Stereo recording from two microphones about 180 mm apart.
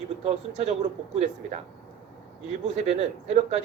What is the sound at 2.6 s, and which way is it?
Speech, 35° right (ahead or behind).